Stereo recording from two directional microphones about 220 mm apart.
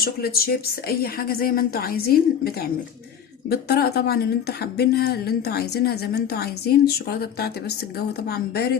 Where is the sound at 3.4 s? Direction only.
45° left (ahead or behind).